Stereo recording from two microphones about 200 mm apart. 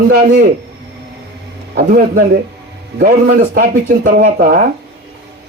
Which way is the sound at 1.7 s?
45° right (ahead or behind).